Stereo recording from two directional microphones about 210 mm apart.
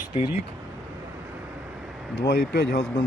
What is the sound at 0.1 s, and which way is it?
Speech, 30° left (ahead or behind).